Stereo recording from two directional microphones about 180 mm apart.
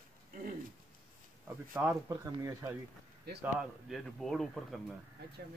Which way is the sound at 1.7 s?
10° right (ahead or behind).